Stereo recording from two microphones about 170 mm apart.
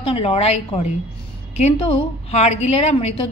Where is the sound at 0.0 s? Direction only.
35° left (ahead or behind).